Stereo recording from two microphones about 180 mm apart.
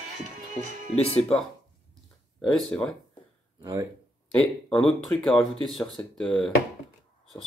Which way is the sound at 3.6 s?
15° right (ahead or behind).